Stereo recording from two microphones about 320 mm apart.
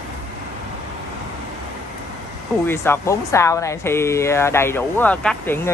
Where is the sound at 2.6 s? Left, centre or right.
Centre.